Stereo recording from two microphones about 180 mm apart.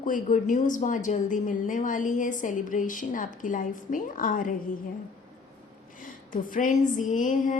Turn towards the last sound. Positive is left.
turn(degrees=45)  # may be behind; listen again after turning